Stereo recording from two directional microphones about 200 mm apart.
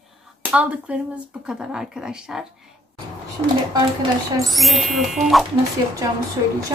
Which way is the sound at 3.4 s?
25° right (ahead or behind).